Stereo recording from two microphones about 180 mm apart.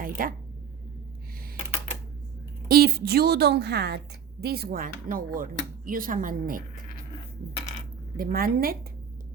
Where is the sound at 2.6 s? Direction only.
55° right (ahead or behind).